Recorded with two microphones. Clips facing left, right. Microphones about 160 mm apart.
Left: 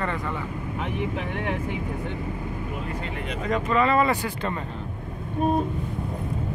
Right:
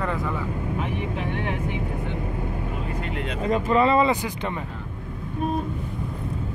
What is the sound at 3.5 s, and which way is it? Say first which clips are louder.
Speech: right 2 dB; 30° right (ahead or behind).